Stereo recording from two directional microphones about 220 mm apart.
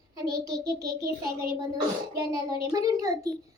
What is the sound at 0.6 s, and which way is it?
Speech, 15° right (ahead or behind).